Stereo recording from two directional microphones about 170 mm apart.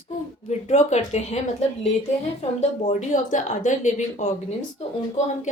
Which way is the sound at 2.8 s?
40° left (ahead or behind).